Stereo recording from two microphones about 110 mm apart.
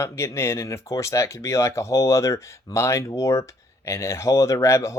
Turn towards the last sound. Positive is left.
turn(degrees=25)  # may be behind; listen again after turning